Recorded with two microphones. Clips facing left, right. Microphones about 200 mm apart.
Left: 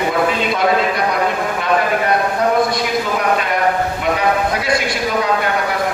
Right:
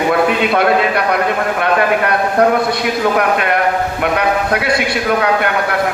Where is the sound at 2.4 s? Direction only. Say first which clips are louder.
Right 3 dB; 60° right (ahead or behind).